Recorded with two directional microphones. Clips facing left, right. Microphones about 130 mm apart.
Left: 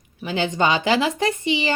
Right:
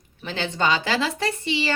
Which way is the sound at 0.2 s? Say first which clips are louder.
Left 4 dB; 15° left (ahead or behind).